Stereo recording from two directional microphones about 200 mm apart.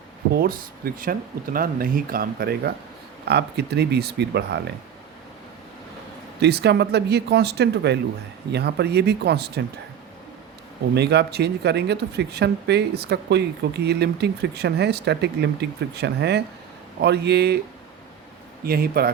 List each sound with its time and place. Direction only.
0.3 s speech: 50° right (ahead or behind)
6.4 s speech: 55° right (ahead or behind)
10.9 s speech: 55° right (ahead or behind)
18.6 s speech: 50° right (ahead or behind)